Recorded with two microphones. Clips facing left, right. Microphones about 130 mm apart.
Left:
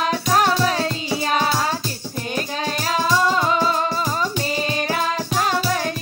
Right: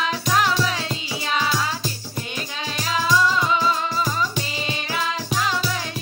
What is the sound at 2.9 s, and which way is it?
Music, 45° left (ahead or behind).